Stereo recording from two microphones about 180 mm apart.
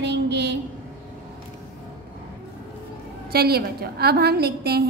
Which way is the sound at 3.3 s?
60° right (ahead or behind).